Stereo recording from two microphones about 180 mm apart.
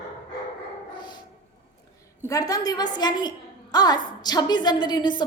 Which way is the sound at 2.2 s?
20° left (ahead or behind).